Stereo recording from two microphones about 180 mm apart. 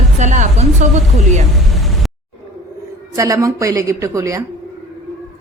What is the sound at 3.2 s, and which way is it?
Speech, 15° right (ahead or behind).